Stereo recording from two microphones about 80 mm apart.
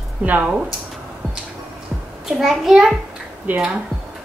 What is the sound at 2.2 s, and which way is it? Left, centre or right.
Speech, centre.